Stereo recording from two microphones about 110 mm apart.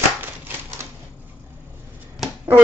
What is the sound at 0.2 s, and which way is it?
Typewriter, 20° right (ahead or behind).